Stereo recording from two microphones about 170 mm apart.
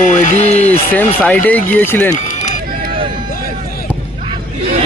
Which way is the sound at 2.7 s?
60° right (ahead or behind).